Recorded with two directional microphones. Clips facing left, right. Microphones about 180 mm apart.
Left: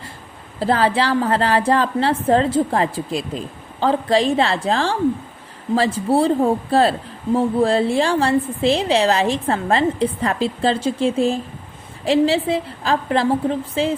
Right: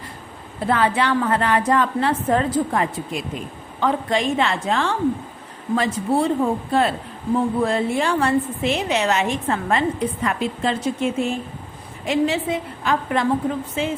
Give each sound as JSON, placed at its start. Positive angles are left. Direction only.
{"t": 0.6, "sound": "a woman's voice", "side_deg": 30}